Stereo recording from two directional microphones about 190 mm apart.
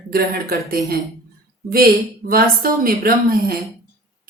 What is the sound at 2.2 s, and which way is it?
Speech, 50° right (ahead or behind).